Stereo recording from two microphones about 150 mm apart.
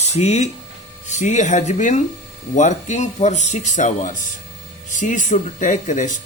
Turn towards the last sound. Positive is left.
turn(degrees=55)  # may be behind; listen again after turning